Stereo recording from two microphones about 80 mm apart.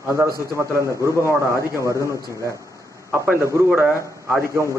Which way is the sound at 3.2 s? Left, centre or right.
Right.